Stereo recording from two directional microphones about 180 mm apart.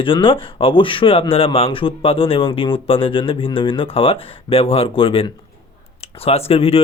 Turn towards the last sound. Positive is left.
turn(degrees=30)  # may be behind; listen again after turning